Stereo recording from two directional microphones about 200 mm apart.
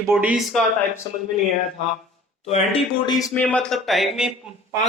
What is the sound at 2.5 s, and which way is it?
Speech, 30° left (ahead or behind).